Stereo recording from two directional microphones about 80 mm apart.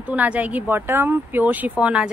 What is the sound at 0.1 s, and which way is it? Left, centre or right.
Speech, centre.